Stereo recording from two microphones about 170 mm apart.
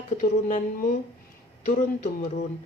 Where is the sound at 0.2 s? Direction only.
50° left (ahead or behind).